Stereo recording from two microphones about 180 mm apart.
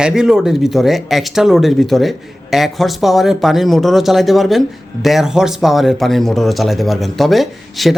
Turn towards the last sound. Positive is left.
turn(degrees=0)  # may be behind; listen again after turning